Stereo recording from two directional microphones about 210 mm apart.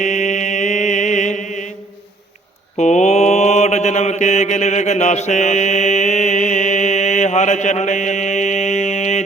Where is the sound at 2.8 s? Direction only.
35° left (ahead or behind).